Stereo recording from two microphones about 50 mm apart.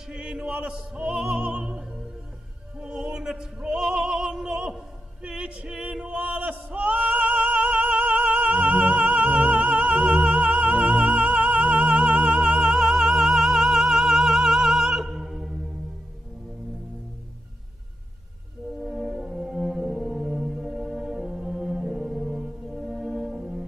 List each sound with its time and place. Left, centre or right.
0.1 s opera: centre
5.9 s singing: right; by 15.5 s centre
18.8 s music: centre
19.1 s brass instrument: centre
21.2 s music: centre